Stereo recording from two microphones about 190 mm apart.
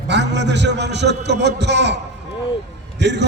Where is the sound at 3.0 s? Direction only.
65° right (ahead or behind).